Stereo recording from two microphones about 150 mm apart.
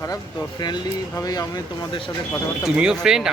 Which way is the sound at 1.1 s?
25° left (ahead or behind).